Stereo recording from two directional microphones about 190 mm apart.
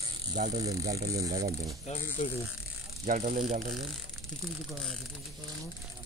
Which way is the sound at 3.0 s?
40° right (ahead or behind).